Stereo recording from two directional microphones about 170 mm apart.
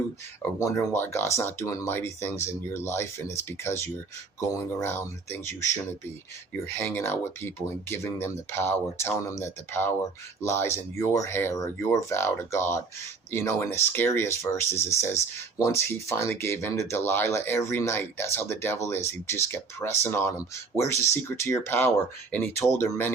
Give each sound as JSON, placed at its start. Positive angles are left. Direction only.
{"t": 0.6, "sound": "speech", "side_deg": 15}
{"t": 6.7, "sound": "speech", "side_deg": 15}